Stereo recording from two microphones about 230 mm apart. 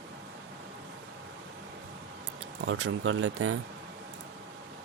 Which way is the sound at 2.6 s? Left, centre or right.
Right.